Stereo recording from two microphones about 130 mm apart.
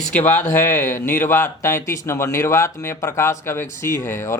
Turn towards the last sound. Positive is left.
turn(degrees=20)  # may be behind; listen again after turning